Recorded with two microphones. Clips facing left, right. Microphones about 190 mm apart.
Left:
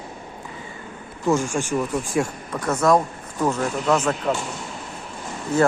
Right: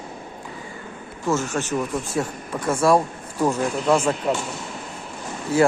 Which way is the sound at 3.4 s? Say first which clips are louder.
Right 1 dB; 10° right (ahead or behind).